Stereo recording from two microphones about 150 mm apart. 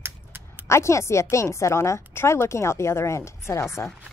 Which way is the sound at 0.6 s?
20° left (ahead or behind).